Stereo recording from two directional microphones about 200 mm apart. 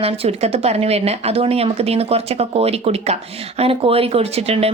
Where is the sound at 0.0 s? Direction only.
30° right (ahead or behind).